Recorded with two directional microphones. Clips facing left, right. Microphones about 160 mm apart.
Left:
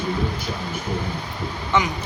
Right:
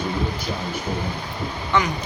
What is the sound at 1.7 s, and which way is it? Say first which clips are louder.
Speech: even; 20° left (ahead or behind).